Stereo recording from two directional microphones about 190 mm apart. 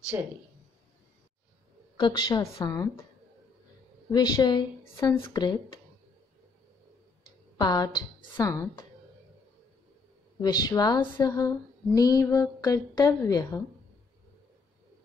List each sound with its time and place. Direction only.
0.1 s speech: 15° right (ahead or behind)
2.0 s speech: 25° left (ahead or behind)
4.1 s speech: 20° left (ahead or behind)
7.5 s speech: 20° left (ahead or behind)
10.4 s speech: 20° left (ahead or behind)